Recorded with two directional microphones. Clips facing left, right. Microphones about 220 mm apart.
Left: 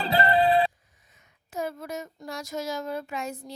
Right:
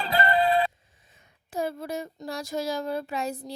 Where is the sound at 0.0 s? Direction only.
30° left (ahead or behind).